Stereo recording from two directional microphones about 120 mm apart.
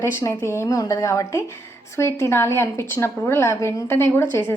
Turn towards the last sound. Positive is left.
turn(degrees=20)  # may be behind; listen again after turning